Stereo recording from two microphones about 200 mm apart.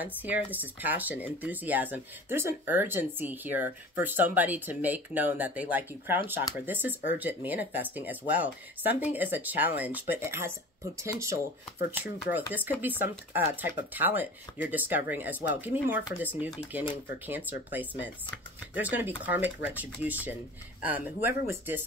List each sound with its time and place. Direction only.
0.0 s speech: 10° right (ahead or behind)